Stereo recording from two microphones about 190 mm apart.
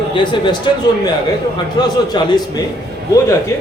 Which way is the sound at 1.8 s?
20° left (ahead or behind).